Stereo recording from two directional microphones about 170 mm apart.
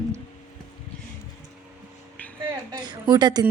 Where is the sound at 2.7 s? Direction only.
25° right (ahead or behind).